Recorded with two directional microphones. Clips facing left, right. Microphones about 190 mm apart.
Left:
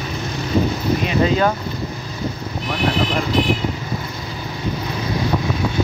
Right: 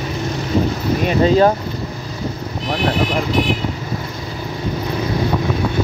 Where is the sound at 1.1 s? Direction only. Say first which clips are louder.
Right 6 dB; 35° right (ahead or behind).